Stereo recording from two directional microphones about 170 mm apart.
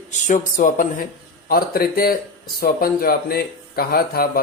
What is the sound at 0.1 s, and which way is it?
Speech, 45° left (ahead or behind).